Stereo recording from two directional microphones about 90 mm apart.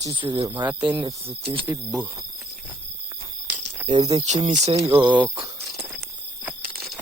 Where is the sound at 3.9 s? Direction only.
90° right.